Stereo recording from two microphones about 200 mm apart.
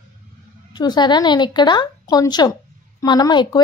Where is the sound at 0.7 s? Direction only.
20° left (ahead or behind).